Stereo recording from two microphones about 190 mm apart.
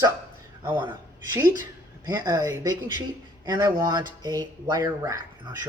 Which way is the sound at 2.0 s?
20° right (ahead or behind).